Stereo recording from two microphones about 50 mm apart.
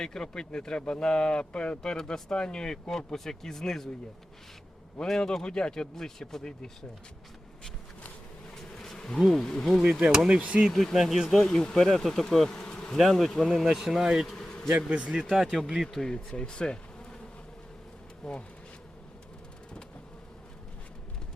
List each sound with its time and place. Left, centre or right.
0.0 s speech: centre
4.9 s speech: centre
8.7 s bee: centre
9.0 s speech: centre
10.2 s speech: centre
10.7 s speech: centre
13.0 s speech: centre
14.3 s a sound: centre
14.7 s speech: right
15.3 s speech: centre
16.0 s bee: centre
18.2 s speech: centre